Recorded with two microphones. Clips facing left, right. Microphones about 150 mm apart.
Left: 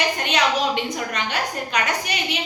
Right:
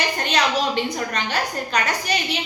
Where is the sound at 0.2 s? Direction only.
35° right (ahead or behind).